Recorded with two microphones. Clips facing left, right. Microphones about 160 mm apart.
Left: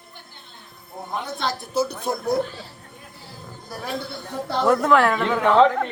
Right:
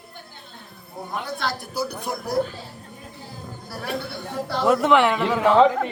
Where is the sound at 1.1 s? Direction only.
20° left (ahead or behind).